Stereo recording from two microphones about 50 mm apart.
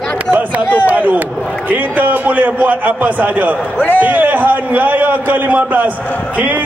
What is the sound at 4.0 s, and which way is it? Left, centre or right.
A man's voice, right.